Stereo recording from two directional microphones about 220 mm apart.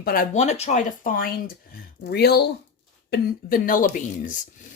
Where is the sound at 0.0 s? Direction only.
40° left (ahead or behind).